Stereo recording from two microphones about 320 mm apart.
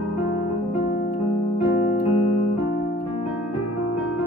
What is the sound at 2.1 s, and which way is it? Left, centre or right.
Keyboard, centre.